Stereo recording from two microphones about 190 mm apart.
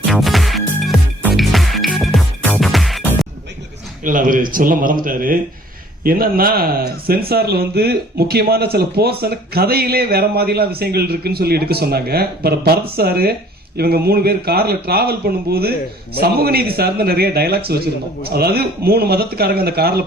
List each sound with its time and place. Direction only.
0.1 s music: centre (ahead or behind)
4.0 s speech: 45° right (ahead or behind)